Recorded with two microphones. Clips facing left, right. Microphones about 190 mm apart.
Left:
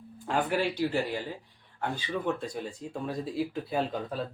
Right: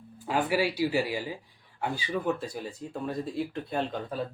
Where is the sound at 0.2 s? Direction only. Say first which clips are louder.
Right 1 dB; 5° right (ahead or behind).